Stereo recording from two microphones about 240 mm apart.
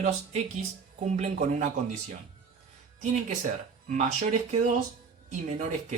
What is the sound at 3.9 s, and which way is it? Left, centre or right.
Speech, right.